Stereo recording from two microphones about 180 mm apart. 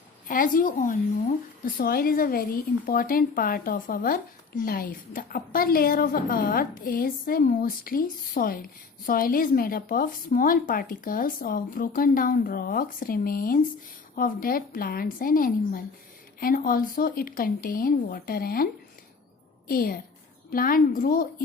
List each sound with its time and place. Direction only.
0.3 s a woman's voice: 50° left (ahead or behind)